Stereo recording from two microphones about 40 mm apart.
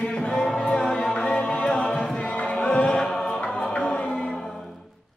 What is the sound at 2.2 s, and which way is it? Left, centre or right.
Music, left.